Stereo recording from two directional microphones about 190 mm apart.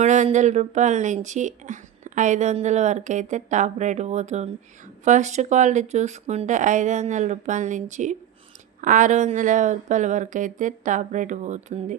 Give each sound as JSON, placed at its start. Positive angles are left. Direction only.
{"t": 0.0, "sound": "speech", "side_deg": -35}